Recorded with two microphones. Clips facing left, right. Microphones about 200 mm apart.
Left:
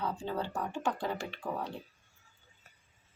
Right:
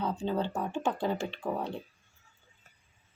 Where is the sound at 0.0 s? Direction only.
20° right (ahead or behind).